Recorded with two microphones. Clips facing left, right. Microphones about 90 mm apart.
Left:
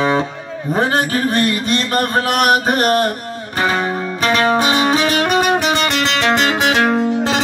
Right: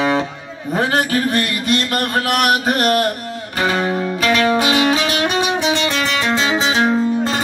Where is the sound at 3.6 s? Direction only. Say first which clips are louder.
Even; 30° left (ahead or behind); by 7.4 s 75° left (ahead or behind).